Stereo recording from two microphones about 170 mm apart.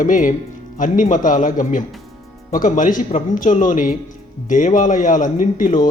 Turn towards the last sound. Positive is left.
turn(degrees=50)  # may be behind; listen again after turning